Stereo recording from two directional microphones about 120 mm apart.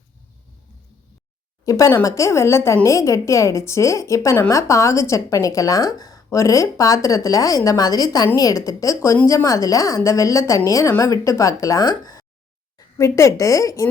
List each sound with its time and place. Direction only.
1.6 s a woman's voice: 25° left (ahead or behind)